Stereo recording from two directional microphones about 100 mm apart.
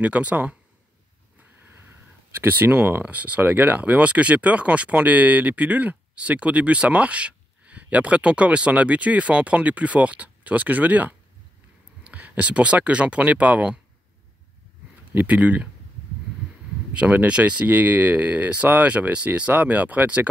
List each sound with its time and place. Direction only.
0.0 s speech: 15° right (ahead or behind)
2.4 s speech: 20° right (ahead or behind)
15.1 s speech: 15° right (ahead or behind)
16.9 s speech: 15° right (ahead or behind)